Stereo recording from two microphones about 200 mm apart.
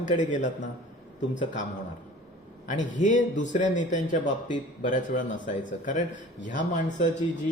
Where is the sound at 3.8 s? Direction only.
40° left (ahead or behind).